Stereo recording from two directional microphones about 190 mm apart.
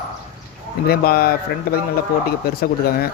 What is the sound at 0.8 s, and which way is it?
Speech, 55° left (ahead or behind).